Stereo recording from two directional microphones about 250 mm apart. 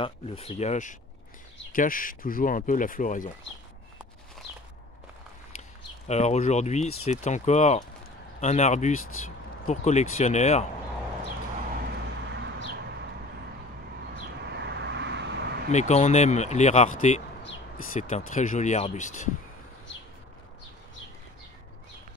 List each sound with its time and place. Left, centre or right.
0.0 s speech: left
6.0 s speech: left
12.3 s a sound: right
14.5 s vehicle: right
15.7 s speech: left
17.4 s a sound: left
18.3 s speech: left